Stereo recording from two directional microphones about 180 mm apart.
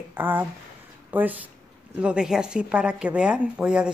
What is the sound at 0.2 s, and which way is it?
Speech, 10° right (ahead or behind).